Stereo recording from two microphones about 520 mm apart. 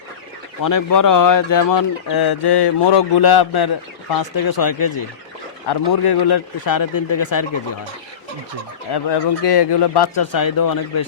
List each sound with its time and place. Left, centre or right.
0.6 s speech: left
8.9 s speech: left